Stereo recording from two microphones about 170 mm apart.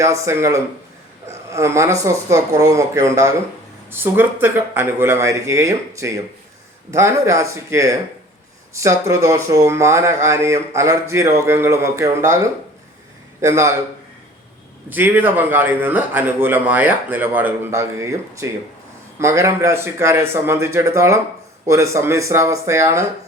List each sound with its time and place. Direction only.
0.0 s a man's voice: 15° right (ahead or behind)
13.4 s a man's voice: 15° right (ahead or behind)
14.8 s a man's voice: 10° right (ahead or behind)